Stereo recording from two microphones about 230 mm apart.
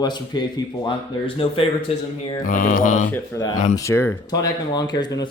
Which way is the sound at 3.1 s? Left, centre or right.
Centre.